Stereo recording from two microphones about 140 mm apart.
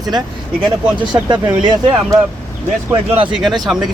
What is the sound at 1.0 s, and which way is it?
Speech, 30° right (ahead or behind).